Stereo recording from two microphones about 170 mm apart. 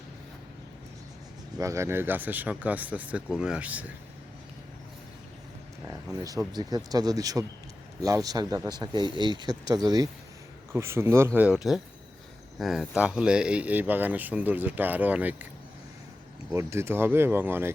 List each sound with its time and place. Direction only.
1.5 s speech: 15° right (ahead or behind)
5.9 s speech: 20° right (ahead or behind)
11.3 s speech: 5° right (ahead or behind)
16.5 s speech: 15° right (ahead or behind)